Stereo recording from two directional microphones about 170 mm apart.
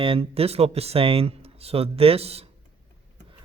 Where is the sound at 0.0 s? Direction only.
35° right (ahead or behind).